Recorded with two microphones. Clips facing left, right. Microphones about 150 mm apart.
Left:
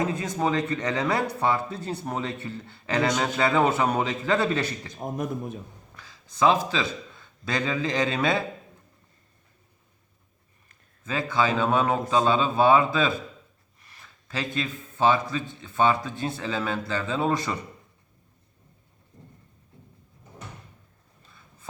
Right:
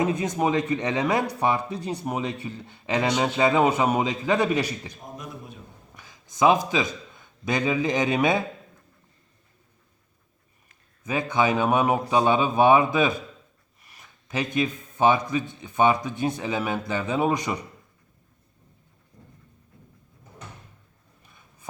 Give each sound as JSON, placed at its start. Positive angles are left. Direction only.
{"t": 0.0, "sound": "a man's voice", "side_deg": -20}
{"t": 4.9, "sound": "a man's voice", "side_deg": 50}
{"t": 6.0, "sound": "a man's voice", "side_deg": -15}
{"t": 11.0, "sound": "a man's voice", "side_deg": -20}
{"t": 21.2, "sound": "a sound", "side_deg": -15}